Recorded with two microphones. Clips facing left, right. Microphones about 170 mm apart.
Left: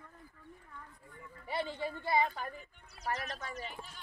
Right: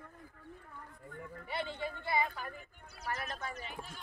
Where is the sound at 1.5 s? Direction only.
40° left (ahead or behind).